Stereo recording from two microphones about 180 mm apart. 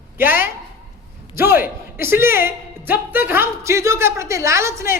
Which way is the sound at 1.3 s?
15° right (ahead or behind).